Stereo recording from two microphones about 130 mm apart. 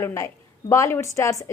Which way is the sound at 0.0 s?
20° left (ahead or behind).